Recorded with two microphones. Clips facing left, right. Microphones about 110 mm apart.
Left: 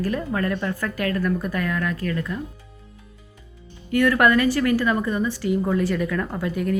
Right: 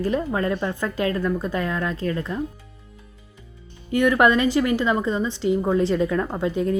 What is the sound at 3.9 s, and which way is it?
Speech, 20° right (ahead or behind).